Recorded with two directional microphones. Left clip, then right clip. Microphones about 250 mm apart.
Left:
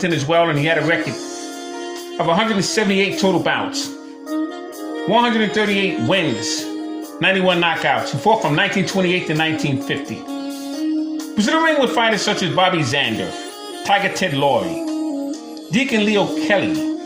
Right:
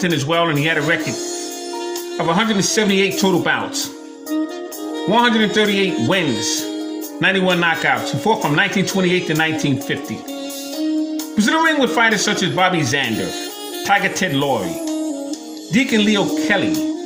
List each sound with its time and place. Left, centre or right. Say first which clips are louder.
0.0 s speech: left 1 dB; centre
2.1 s speech: left 1 dB; centre
5.0 s speech: right 1 dB; right
11.3 s speech: even; centre
15.7 s speech: right 1 dB; centre